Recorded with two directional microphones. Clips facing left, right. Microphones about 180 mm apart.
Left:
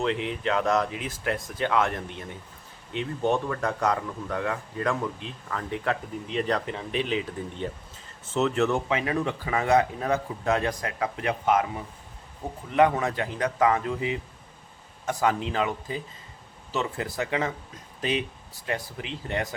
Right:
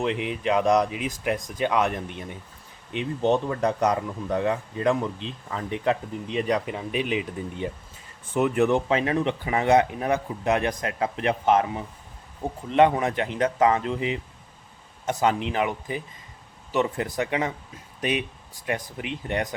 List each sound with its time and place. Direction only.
0.0 s speech: 15° right (ahead or behind)
8.9 s speech: 30° right (ahead or behind)
12.7 s speech: 20° right (ahead or behind)
18.6 s speech: 20° right (ahead or behind)